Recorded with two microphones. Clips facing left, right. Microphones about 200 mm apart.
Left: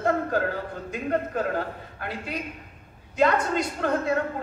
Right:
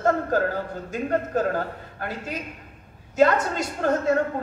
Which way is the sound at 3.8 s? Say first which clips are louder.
Right 6 dB; 45° right (ahead or behind).